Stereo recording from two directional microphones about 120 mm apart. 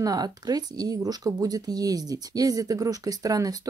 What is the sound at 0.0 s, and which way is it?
Speech, 30° right (ahead or behind).